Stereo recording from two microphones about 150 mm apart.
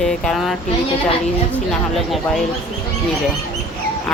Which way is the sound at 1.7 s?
Centre (ahead or behind).